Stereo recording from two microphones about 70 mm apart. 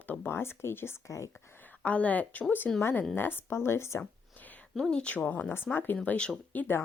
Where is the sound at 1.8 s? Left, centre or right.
Centre.